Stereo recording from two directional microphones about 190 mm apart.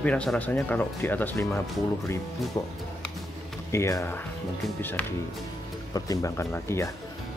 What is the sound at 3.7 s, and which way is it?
Speech, 15° left (ahead or behind).